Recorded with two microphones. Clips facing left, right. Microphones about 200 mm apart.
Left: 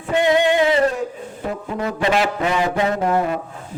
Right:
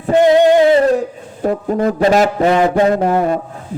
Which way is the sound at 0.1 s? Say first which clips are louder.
Right 7 dB; 40° right (ahead or behind).